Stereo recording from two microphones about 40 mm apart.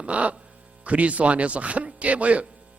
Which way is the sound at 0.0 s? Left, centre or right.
Right.